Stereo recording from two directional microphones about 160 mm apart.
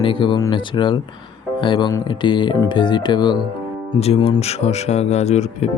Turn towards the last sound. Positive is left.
turn(degrees=45)  # may be behind; listen again after turning